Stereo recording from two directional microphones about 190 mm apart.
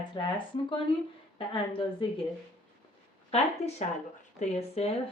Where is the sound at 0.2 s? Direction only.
25° left (ahead or behind).